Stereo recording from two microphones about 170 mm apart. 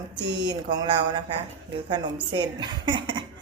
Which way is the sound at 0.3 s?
25° right (ahead or behind).